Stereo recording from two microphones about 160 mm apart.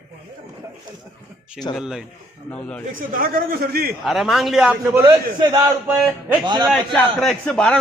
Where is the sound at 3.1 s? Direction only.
65° right (ahead or behind).